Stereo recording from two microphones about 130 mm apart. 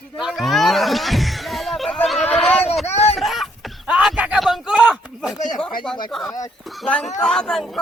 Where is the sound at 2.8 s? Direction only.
55° left (ahead or behind).